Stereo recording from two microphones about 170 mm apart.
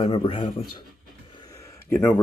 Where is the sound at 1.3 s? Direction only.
25° left (ahead or behind).